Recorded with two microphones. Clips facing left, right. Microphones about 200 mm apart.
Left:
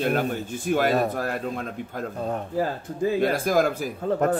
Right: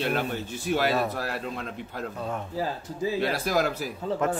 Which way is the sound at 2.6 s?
55° left (ahead or behind).